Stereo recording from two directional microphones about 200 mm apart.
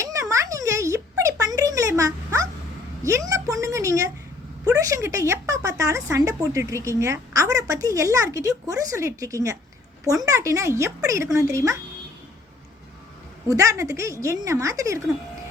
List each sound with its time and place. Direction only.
0.0 s a sound: 15° right (ahead or behind)
4.8 s speech: 15° right (ahead or behind)
13.5 s speech: 15° right (ahead or behind)